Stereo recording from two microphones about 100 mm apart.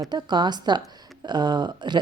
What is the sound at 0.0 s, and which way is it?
A woman's voice, 45° right (ahead or behind).